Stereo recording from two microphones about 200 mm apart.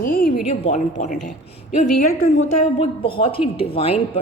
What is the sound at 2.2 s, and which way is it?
Speech, 90° left.